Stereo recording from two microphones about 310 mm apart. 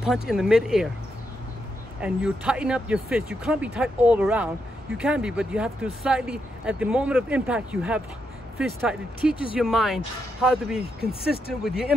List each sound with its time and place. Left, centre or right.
0.0 s speech: centre
2.0 s speech: centre